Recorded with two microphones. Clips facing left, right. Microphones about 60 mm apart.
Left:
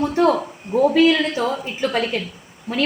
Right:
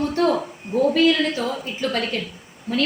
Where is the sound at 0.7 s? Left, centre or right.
Centre.